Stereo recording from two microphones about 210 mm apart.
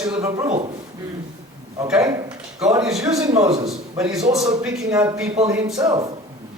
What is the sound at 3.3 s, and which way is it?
Speech, 30° right (ahead or behind).